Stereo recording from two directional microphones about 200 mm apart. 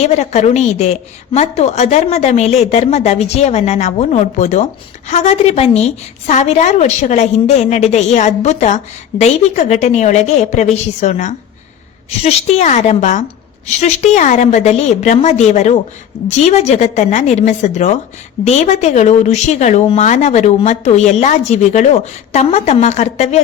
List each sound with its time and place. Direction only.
0.0 s a woman's voice: 35° left (ahead or behind)